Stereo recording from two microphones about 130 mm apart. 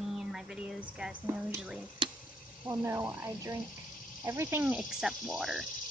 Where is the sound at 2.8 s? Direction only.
15° right (ahead or behind).